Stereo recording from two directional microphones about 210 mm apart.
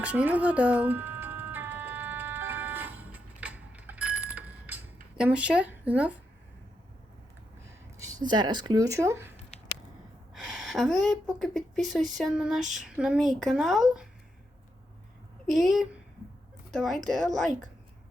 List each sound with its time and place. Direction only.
0.0 s ice cream truck: 5° right (ahead or behind)
8.3 s speech: 20° right (ahead or behind)
9.5 s a sound: 30° left (ahead or behind)
10.3 s speech: centre (ahead or behind)
15.4 s speech: centre (ahead or behind)